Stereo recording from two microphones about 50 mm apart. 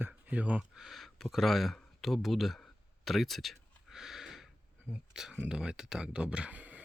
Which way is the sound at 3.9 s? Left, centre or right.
Centre.